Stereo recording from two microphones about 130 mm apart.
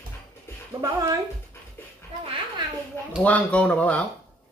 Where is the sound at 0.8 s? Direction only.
25° right (ahead or behind).